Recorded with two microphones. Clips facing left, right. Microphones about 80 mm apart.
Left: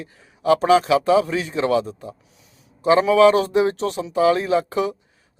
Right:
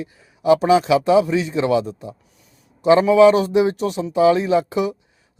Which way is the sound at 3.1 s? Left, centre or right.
Centre.